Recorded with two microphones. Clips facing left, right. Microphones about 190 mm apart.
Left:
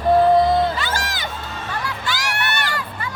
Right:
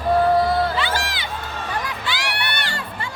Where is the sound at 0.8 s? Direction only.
45° left (ahead or behind).